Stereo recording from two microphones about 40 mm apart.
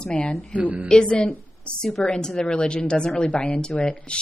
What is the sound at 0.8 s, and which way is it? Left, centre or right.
A woman's voice, centre.